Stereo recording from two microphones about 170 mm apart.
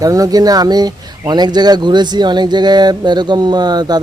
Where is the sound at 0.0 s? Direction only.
20° right (ahead or behind).